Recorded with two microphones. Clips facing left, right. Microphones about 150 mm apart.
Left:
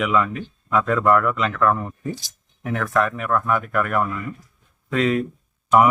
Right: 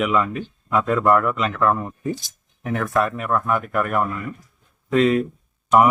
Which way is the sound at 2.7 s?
5° right (ahead or behind).